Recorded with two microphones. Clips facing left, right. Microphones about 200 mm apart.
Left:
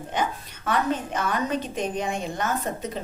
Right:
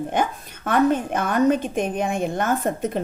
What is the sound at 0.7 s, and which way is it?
A woman's voice, 55° right (ahead or behind).